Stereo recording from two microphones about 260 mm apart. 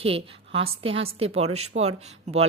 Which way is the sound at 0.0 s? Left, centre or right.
Right.